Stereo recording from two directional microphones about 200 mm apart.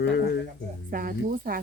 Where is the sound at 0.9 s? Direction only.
45° right (ahead or behind).